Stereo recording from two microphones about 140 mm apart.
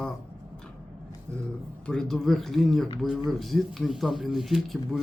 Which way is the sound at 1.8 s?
5° left (ahead or behind).